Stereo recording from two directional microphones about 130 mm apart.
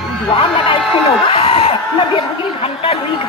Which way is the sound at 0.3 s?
40° left (ahead or behind).